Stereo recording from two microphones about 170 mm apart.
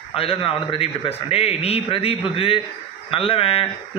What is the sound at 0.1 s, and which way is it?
A man's voice, 35° left (ahead or behind).